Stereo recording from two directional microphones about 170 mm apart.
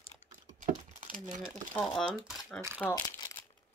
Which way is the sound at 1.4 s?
Centre (ahead or behind).